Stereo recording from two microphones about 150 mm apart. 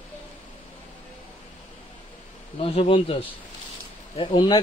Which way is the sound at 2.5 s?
40° left (ahead or behind).